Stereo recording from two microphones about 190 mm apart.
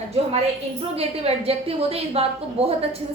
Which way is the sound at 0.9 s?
30° right (ahead or behind).